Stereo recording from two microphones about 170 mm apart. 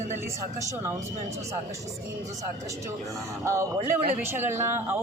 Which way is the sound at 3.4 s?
15° right (ahead or behind).